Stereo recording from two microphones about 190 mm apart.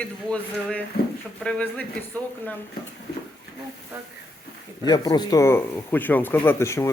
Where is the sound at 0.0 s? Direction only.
5° left (ahead or behind).